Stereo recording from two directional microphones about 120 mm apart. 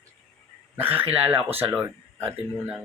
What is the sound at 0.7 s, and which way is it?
Speech, 15° right (ahead or behind).